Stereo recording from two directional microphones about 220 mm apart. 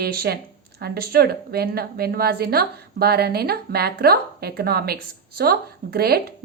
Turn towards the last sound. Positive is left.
turn(degrees=-45)  # may be behind; listen again after turning